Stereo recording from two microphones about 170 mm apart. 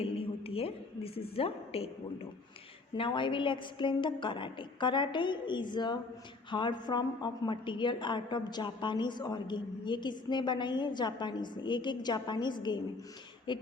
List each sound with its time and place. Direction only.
0.0 s a woman's voice: 35° left (ahead or behind)
2.9 s a woman's voice: 30° left (ahead or behind)